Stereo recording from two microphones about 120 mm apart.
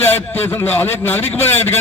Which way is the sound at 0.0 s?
15° left (ahead or behind).